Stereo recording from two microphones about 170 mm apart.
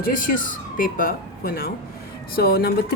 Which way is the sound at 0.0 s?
55° left (ahead or behind).